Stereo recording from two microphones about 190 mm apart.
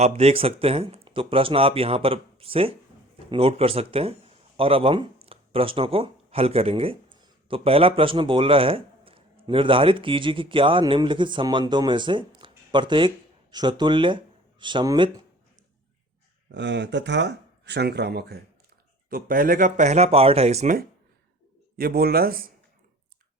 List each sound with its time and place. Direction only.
0.0 s a man's voice: 35° right (ahead or behind)
16.6 s speech: 65° right (ahead or behind); by 20.7 s 35° right (ahead or behind)
21.8 s a man's voice: 50° right (ahead or behind)